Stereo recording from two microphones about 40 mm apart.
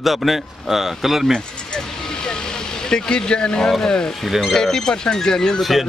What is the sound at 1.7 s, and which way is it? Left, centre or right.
Vehicle, centre.